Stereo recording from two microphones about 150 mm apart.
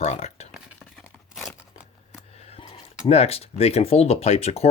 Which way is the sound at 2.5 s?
40° left (ahead or behind).